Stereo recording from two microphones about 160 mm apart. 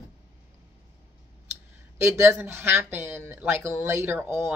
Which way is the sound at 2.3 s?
15° right (ahead or behind).